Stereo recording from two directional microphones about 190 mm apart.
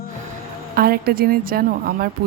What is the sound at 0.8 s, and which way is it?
A woman's voice, 55° right (ahead or behind).